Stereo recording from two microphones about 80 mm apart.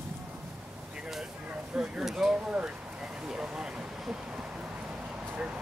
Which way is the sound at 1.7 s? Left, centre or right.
Centre.